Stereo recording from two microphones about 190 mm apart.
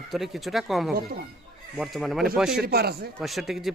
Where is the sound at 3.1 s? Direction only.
Centre (ahead or behind).